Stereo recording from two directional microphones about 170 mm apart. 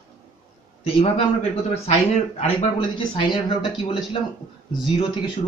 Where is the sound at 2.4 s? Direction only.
35° left (ahead or behind).